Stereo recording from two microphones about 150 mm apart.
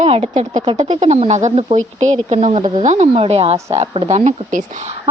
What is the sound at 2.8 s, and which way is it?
A woman's voice, 50° right (ahead or behind).